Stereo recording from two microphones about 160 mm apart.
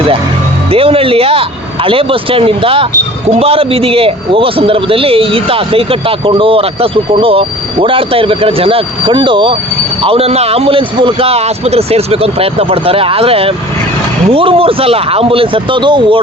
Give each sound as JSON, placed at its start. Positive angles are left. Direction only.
{"t": 0.7, "sound": "a man's voice", "side_deg": -35}